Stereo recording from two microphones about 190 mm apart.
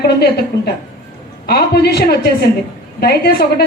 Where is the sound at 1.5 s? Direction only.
55° left (ahead or behind).